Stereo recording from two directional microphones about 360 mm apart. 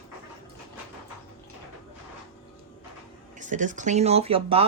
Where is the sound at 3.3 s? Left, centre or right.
Right.